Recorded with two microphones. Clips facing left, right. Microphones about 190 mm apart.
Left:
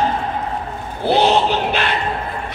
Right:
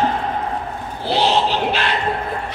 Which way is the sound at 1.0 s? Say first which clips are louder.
Left 3 dB; 55° left (ahead or behind).